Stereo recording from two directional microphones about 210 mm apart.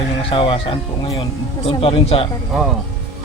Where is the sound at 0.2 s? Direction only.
25° left (ahead or behind).